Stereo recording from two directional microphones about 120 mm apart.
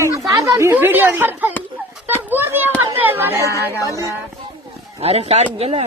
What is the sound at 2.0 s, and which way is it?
Children playing, 15° right (ahead or behind).